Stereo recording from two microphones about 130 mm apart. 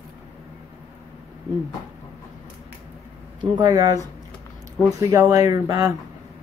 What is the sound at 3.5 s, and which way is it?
Speech, 30° right (ahead or behind).